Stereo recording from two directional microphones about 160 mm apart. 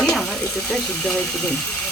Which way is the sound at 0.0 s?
5° left (ahead or behind).